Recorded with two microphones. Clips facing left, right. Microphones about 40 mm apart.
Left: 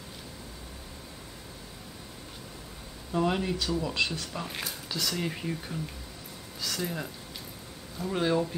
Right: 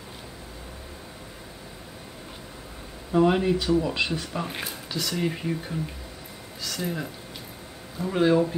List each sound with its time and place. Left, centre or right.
3.1 s speech: centre